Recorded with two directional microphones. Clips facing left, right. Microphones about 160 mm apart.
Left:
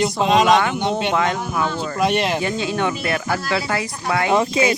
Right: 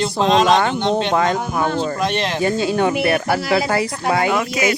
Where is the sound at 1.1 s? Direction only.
40° right (ahead or behind).